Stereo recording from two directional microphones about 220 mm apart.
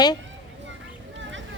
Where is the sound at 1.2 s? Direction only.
55° right (ahead or behind).